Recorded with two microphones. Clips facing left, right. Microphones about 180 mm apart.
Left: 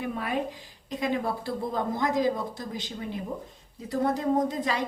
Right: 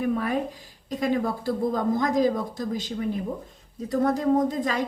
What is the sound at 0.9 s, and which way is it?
A woman's voice, 45° right (ahead or behind).